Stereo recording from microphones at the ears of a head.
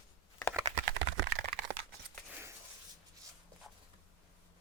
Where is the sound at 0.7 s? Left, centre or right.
Right.